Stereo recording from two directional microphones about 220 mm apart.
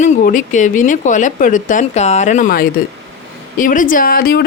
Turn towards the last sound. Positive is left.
turn(degrees=40)  # may be behind; listen again after turning